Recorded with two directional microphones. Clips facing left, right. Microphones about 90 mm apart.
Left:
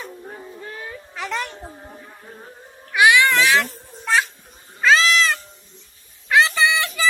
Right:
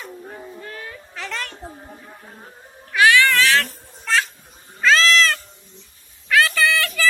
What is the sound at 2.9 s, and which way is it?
Cat, 15° left (ahead or behind).